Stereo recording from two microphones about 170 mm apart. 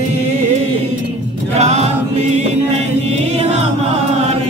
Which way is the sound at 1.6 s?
40° right (ahead or behind).